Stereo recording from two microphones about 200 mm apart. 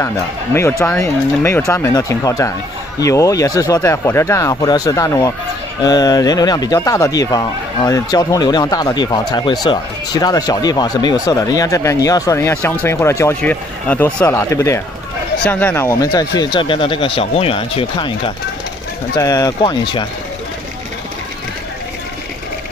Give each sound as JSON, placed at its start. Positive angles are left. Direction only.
{"t": 0.0, "sound": "speech", "side_deg": 15}